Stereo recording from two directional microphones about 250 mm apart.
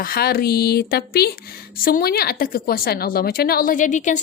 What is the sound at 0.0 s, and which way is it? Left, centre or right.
Speech, left.